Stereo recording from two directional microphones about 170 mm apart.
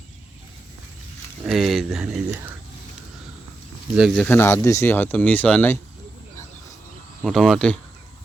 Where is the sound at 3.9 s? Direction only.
Centre (ahead or behind).